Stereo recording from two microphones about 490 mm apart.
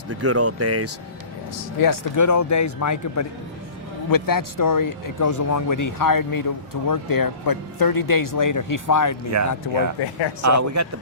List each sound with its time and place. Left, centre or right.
0.1 s speech: right
1.8 s speech: left
9.3 s speech: right